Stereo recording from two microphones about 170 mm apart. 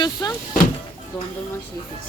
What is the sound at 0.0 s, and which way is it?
Speech, 25° left (ahead or behind).